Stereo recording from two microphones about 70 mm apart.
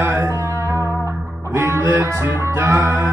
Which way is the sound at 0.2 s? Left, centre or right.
Right.